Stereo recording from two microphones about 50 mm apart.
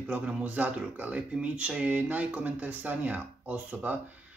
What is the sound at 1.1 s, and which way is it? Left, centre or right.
Speech, right.